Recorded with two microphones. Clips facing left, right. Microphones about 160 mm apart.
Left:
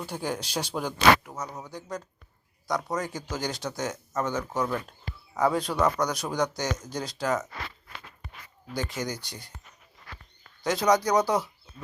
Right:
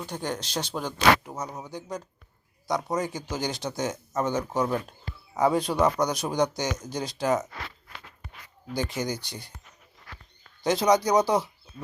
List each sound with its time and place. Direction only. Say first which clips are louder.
0.0 s speech: even; 5° left (ahead or behind)
1.2 s speech: right 2 dB; 20° right (ahead or behind)
8.7 s speech: right 3 dB; 25° right (ahead or behind)
10.6 s speech: right 2 dB; 25° right (ahead or behind)